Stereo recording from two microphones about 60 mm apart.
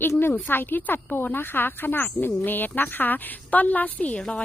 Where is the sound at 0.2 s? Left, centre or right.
Left.